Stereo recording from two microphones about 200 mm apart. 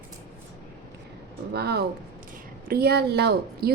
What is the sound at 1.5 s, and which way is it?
A woman's voice, 55° right (ahead or behind).